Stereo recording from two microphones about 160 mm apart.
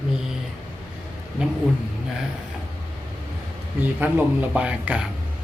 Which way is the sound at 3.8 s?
10° right (ahead or behind).